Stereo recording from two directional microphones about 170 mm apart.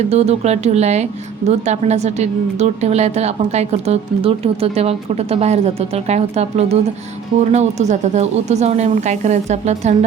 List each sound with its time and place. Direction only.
0.1 s a woman's voice: 40° right (ahead or behind)